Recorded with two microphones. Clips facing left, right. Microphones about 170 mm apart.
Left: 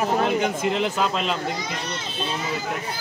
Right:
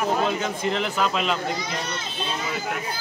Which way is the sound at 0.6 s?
5° left (ahead or behind).